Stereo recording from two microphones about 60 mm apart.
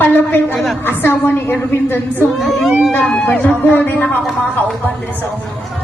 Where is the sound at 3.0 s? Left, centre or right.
Left.